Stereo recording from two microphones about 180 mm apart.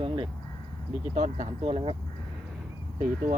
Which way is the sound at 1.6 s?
30° right (ahead or behind).